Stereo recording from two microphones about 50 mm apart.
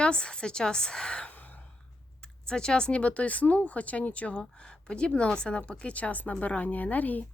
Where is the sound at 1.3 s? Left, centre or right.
Left.